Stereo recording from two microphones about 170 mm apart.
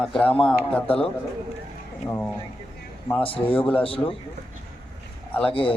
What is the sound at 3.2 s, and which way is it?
Speech, 30° left (ahead or behind).